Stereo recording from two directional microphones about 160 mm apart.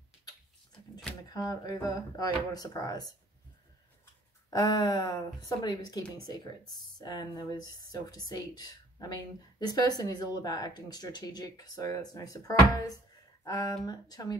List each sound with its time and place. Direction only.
1.3 s speech: 25° left (ahead or behind)
4.5 s speech: 25° left (ahead or behind)